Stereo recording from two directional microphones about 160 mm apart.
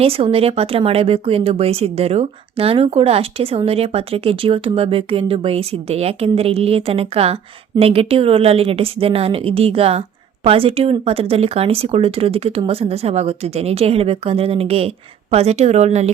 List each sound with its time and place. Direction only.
0.0 s speech: 35° right (ahead or behind)